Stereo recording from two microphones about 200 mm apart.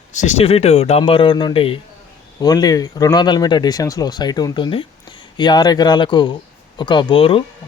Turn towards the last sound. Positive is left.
turn(degrees=25)  # may be behind; listen again after turning